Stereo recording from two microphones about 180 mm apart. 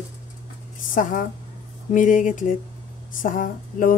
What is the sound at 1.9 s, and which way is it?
Speech, 45° left (ahead or behind).